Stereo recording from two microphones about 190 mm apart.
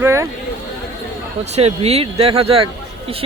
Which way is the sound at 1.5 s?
35° right (ahead or behind).